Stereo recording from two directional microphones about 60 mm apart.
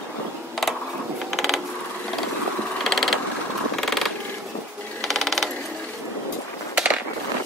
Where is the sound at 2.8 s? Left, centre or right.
Centre.